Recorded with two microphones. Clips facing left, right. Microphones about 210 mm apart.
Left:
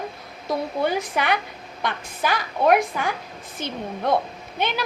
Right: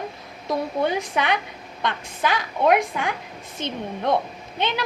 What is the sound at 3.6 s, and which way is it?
Speech, 20° right (ahead or behind).